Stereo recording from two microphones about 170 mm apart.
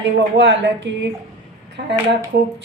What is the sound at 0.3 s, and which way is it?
Speech, 90° right.